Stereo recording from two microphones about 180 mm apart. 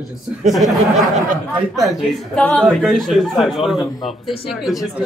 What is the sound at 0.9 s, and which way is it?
Speech, 40° right (ahead or behind).